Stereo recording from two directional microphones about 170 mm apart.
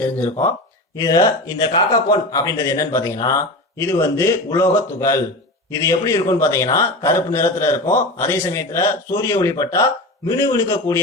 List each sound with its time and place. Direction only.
0.0 s a man's voice: 10° left (ahead or behind)